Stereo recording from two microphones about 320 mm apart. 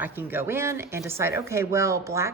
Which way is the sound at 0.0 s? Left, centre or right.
Centre.